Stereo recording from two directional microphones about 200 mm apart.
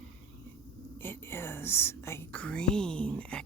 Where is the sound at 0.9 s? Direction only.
10° left (ahead or behind).